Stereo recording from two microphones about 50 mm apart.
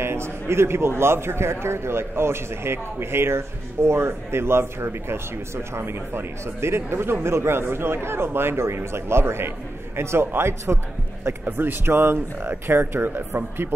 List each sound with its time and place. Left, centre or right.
0.0 s a man's voice: right
11.4 s speech: right